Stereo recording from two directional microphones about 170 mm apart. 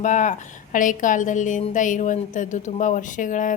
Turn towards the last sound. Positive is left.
turn(degrees=50)  # may be behind; listen again after turning